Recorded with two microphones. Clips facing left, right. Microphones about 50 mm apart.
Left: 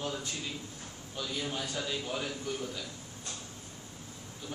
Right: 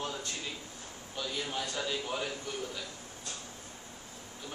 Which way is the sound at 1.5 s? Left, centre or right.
Centre.